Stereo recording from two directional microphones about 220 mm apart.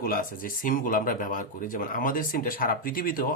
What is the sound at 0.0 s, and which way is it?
Speech, 40° left (ahead or behind).